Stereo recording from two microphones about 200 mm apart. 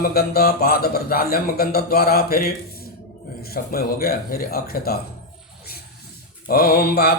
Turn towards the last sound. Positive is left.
turn(degrees=50)  # may be behind; listen again after turning